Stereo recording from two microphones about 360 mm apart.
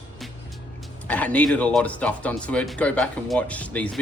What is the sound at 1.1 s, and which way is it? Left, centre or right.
Speech, centre.